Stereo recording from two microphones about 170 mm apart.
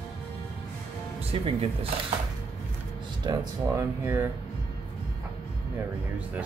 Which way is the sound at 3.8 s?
15° right (ahead or behind).